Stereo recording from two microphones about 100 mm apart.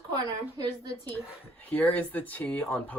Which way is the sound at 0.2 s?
40° right (ahead or behind).